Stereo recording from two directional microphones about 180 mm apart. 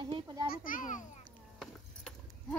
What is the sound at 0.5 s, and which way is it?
Speech, 50° left (ahead or behind).